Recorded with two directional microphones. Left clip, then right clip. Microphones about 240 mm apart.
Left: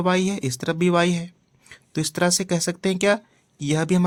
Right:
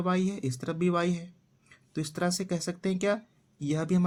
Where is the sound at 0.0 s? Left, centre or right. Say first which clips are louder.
Left 8 dB; left.